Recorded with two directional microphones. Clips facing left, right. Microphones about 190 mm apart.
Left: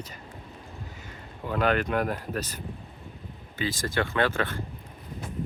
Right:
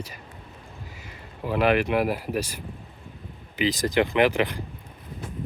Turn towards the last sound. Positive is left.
turn(degrees=-15)  # may be behind; listen again after turning